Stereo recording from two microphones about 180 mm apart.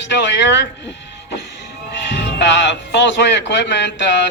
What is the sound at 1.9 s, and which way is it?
Speech, 75° left (ahead or behind).